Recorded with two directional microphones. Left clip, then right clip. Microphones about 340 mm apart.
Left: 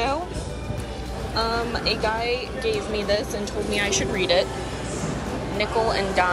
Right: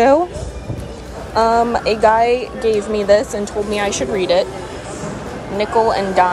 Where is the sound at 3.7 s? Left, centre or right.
Centre.